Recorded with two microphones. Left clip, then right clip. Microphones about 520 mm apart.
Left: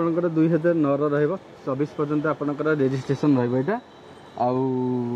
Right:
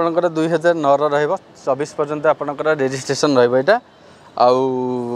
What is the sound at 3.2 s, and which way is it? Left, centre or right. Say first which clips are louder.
Speech: right 10 dB; right.